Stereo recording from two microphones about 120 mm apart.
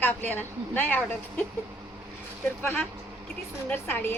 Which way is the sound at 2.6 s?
20° left (ahead or behind).